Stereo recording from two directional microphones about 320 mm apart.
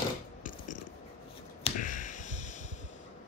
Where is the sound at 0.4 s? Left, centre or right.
Left.